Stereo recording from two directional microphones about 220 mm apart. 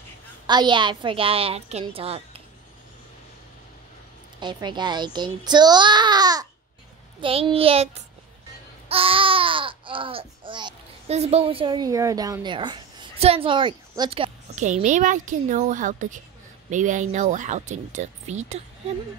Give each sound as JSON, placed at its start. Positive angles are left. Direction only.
{"t": 0.5, "sound": "a child's voice", "side_deg": -20}
{"t": 4.4, "sound": "a child's voice", "side_deg": -20}